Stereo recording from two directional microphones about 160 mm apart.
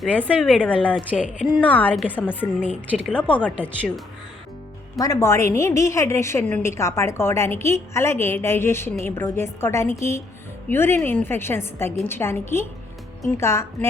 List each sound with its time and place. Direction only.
0.0 s a woman's voice: 10° left (ahead or behind)
1.1 s speech: 5° right (ahead or behind)
1.6 s a woman's voice: 10° left (ahead or behind)
4.9 s a woman's voice: 20° left (ahead or behind)